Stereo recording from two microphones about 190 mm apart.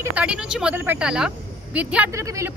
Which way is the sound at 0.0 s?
5° right (ahead or behind).